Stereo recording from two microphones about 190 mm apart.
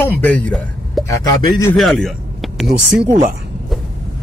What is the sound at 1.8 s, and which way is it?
Speech, centre (ahead or behind).